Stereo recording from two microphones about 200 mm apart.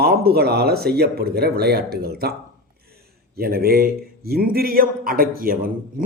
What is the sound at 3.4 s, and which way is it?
Speech, 50° right (ahead or behind).